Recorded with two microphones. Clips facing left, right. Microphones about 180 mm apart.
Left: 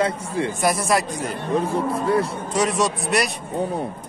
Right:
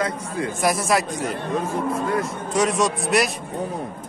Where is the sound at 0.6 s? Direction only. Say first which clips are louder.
Right 1 dB; centre (ahead or behind).